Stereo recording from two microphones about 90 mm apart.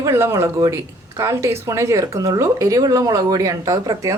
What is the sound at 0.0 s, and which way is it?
Speech, 30° right (ahead or behind).